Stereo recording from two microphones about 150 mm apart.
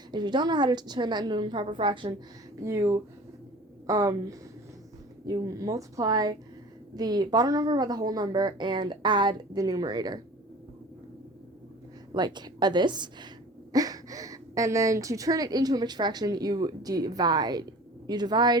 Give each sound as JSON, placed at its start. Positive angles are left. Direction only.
{"t": 0.1, "sound": "a woman's voice", "side_deg": -30}
{"t": 2.6, "sound": "a woman's voice", "side_deg": -20}
{"t": 12.1, "sound": "a woman's voice", "side_deg": -30}